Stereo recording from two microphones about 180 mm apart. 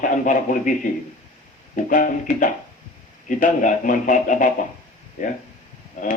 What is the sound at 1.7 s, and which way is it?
Speech, 45° left (ahead or behind).